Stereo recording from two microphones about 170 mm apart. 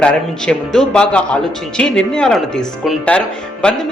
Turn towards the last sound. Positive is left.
turn(degrees=5)  # may be behind; listen again after turning